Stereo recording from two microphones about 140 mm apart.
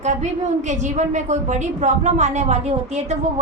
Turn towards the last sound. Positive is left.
turn(degrees=-50)  # may be behind; listen again after turning